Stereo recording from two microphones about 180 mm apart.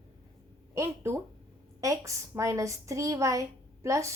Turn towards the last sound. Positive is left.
turn(degrees=-15)  # may be behind; listen again after turning